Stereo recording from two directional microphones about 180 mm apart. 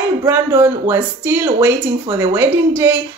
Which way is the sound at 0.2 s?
15° right (ahead or behind).